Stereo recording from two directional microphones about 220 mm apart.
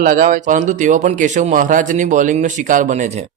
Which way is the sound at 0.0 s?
35° right (ahead or behind).